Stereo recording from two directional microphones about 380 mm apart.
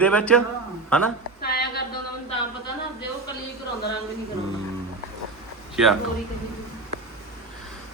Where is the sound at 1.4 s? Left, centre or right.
Left.